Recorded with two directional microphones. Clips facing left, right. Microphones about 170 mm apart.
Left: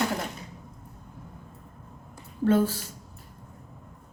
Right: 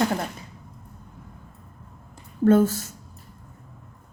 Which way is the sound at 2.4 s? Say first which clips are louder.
Right 5 dB; 45° right (ahead or behind).